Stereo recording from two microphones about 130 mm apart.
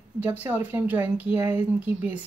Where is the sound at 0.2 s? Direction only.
15° right (ahead or behind).